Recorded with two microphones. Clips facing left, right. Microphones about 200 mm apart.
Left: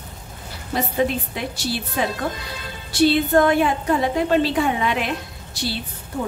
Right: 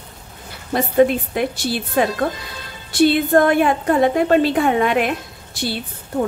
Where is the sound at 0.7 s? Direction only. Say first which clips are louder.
Right 6 dB; 55° right (ahead or behind).